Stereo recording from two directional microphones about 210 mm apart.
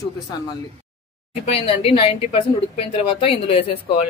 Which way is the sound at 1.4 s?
25° left (ahead or behind).